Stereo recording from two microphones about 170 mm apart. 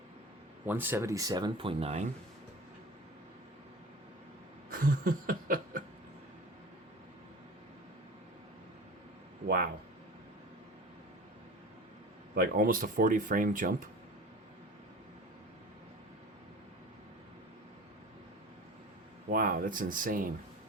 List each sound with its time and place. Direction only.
0.6 s speech: 10° right (ahead or behind); by 2.0 s 40° right (ahead or behind)
4.7 s a sound: 55° right (ahead or behind)
12.3 s speech: 60° right (ahead or behind)
19.3 s speech: 55° right (ahead or behind)